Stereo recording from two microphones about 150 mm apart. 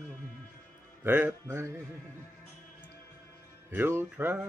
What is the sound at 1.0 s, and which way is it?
Music, 10° right (ahead or behind).